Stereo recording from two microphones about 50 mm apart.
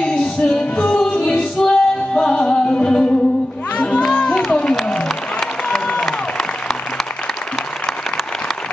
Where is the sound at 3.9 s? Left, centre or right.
Left.